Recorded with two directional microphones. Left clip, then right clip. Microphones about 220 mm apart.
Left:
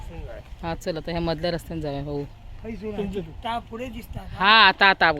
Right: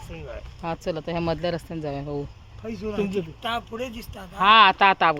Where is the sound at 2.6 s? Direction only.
50° right (ahead or behind).